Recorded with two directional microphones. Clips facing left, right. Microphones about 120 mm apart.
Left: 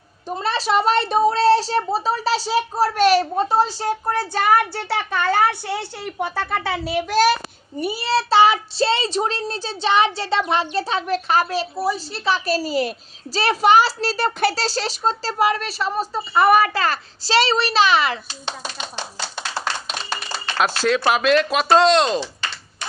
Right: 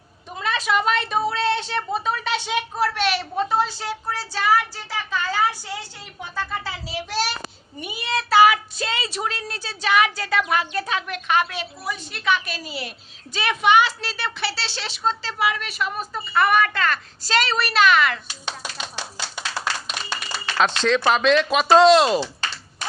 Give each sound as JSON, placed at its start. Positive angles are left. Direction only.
{"t": 0.3, "sound": "a woman's voice", "side_deg": 35}
{"t": 4.0, "sound": "a child's voice", "side_deg": 55}
{"t": 7.8, "sound": "a woman's voice", "side_deg": 35}
{"t": 20.6, "sound": "speech", "side_deg": 5}